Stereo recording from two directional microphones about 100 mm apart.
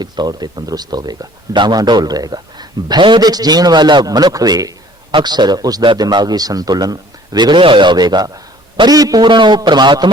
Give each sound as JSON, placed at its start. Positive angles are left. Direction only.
{"t": 0.0, "sound": "a man's voice", "side_deg": -40}